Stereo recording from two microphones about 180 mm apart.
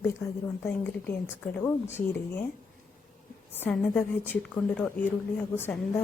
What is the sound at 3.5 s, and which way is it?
Speech, 10° left (ahead or behind).